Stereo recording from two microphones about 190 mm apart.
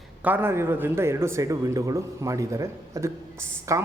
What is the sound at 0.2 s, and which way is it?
Speech, 10° right (ahead or behind).